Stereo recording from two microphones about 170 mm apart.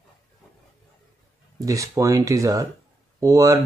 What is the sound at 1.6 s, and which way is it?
Speech, 20° right (ahead or behind).